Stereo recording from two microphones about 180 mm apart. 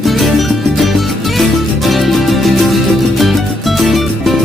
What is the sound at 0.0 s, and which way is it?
Music, centre (ahead or behind).